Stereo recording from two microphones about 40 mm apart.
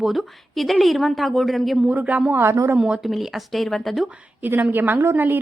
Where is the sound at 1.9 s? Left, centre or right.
Right.